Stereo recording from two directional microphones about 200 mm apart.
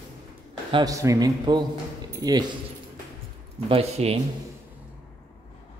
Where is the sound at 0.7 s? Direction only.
20° right (ahead or behind).